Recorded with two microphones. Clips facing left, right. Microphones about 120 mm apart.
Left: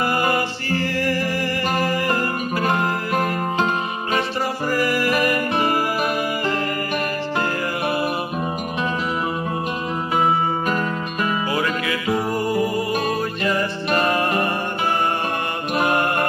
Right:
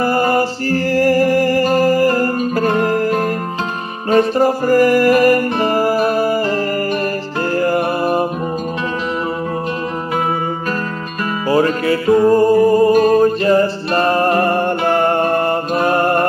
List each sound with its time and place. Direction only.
0.0 s music: 40° right (ahead or behind)
4.1 s music: 40° right (ahead or behind)
7.5 s music: 45° right (ahead or behind)
11.4 s music: 35° right (ahead or behind)
15.7 s mantra: 35° right (ahead or behind)